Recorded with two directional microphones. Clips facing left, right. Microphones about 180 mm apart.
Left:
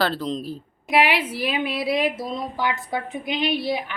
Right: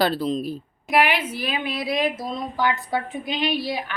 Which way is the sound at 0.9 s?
25° left (ahead or behind).